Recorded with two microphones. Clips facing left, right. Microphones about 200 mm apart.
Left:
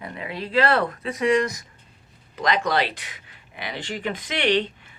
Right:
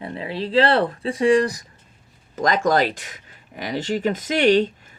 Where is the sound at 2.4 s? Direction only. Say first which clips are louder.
Right 4 dB; 45° right (ahead or behind).